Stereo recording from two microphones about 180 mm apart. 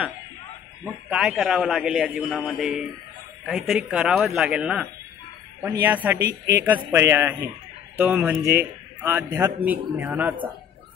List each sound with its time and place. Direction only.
1.1 s a man's voice: centre (ahead or behind)
6.1 s speech: 65° right (ahead or behind)
6.9 s a man's voice: 15° right (ahead or behind)